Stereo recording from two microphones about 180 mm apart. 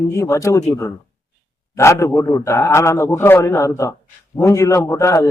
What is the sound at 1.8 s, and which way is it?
Speech, 15° left (ahead or behind).